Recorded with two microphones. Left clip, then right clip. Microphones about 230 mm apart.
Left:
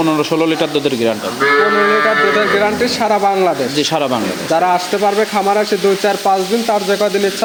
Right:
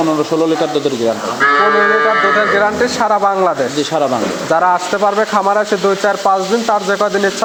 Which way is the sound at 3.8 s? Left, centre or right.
Left.